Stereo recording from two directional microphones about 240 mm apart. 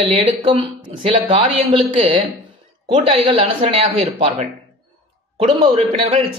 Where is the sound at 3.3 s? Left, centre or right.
Right.